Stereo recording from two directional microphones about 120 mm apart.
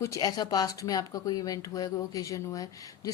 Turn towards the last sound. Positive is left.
turn(degrees=30)  # may be behind; listen again after turning